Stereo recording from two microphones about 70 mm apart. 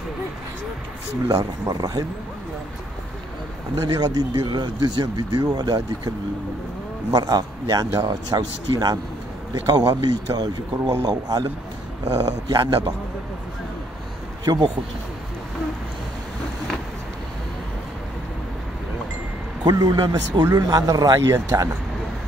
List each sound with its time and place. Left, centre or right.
1.2 s speech: right
3.8 s speech: right
7.1 s speech: right
8.3 s speech: right
11.1 s speech: right
14.4 s speech: right
19.6 s speech: right